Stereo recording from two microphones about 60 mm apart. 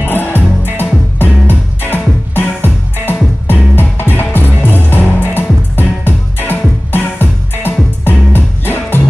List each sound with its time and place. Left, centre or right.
0.0 s music: left